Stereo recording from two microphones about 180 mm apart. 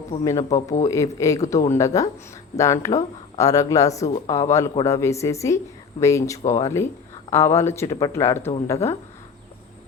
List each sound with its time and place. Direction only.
0.3 s speech: 20° left (ahead or behind)